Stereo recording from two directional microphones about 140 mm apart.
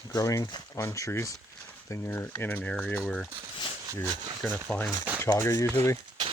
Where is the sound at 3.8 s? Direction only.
25° right (ahead or behind).